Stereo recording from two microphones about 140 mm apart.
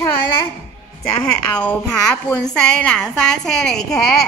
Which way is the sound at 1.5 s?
10° left (ahead or behind).